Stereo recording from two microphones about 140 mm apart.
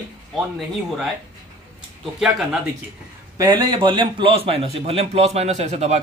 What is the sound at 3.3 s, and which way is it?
A man's voice, 30° right (ahead or behind).